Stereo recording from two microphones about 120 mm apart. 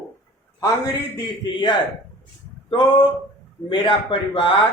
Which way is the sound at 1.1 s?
35° left (ahead or behind).